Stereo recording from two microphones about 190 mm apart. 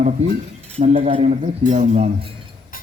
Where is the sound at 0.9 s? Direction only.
30° right (ahead or behind).